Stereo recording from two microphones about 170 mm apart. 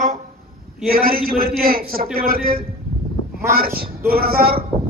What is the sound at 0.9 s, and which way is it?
A man's voice, 60° right (ahead or behind).